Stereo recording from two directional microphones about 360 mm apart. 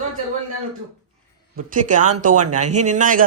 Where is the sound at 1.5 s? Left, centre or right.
Right.